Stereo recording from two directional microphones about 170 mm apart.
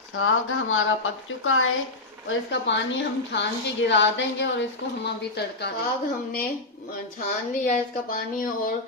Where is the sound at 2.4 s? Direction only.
90° left.